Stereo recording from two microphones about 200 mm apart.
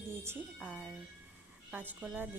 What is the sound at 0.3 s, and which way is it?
Speech, 5° right (ahead or behind).